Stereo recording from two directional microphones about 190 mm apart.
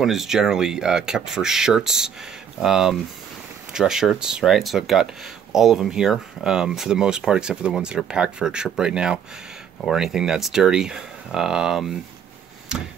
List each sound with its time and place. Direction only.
0.0 s speech: centre (ahead or behind)